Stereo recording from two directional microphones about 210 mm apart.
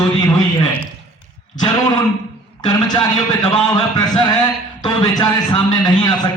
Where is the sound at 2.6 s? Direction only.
20° left (ahead or behind).